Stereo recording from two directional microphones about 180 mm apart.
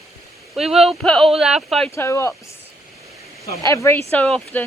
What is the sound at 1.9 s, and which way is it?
Speech, 15° left (ahead or behind).